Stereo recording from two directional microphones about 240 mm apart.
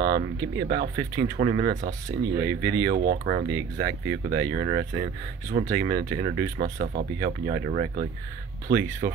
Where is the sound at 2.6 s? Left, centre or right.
Right.